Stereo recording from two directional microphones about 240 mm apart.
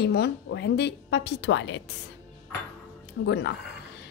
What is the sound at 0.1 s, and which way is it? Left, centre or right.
A woman's voice, left.